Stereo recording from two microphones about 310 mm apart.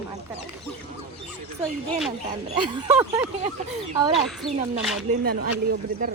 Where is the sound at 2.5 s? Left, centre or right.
Centre.